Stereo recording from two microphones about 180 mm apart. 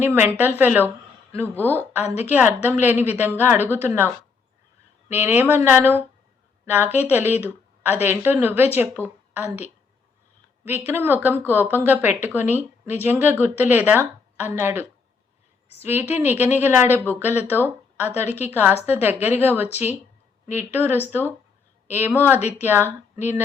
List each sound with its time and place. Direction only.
0.0 s speech: 10° right (ahead or behind)
2.0 s a woman's voice: 35° left (ahead or behind)
2.3 s a woman's voice: 10° right (ahead or behind)
10.7 s speech: 10° right (ahead or behind)